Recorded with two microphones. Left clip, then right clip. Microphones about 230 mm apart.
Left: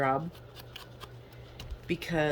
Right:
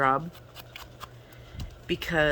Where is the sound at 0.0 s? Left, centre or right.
Centre.